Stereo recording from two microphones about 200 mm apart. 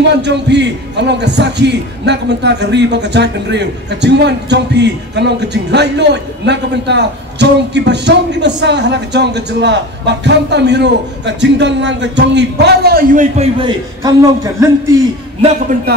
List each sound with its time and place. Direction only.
0.1 s a man's voice: 60° right (ahead or behind); by 13.5 s 40° right (ahead or behind)
13.6 s a man's voice: 20° right (ahead or behind)
15.7 s music: 40° right (ahead or behind)